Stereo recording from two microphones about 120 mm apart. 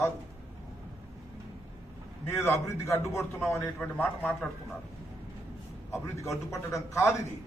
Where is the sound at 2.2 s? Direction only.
20° left (ahead or behind).